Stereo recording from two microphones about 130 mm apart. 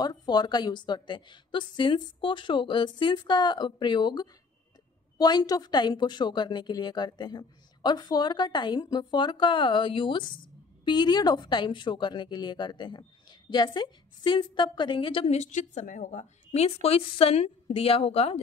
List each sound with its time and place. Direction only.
0.0 s a woman's voice: 30° left (ahead or behind)
15.3 s speech: 60° left (ahead or behind)